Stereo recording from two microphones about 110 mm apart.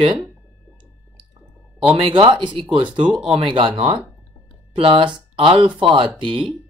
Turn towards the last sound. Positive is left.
turn(degrees=-50)  # may be behind; listen again after turning